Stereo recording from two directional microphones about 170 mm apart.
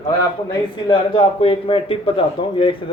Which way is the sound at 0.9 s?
35° left (ahead or behind).